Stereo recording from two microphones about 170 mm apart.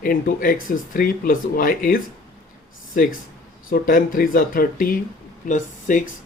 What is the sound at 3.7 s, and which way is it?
Speech, 55° left (ahead or behind).